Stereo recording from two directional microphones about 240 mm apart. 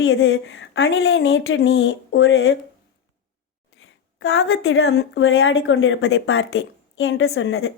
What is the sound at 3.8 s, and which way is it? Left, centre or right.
Speech, left.